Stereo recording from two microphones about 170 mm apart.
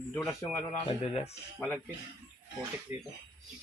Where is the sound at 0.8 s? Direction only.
35° left (ahead or behind).